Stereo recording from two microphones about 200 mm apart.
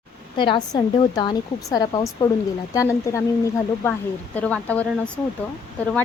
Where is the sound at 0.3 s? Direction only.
25° left (ahead or behind).